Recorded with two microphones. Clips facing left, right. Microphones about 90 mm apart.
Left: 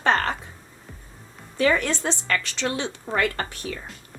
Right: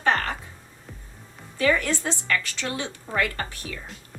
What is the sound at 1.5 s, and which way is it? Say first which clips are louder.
A woman's voice: left 1 dB; 25° left (ahead or behind).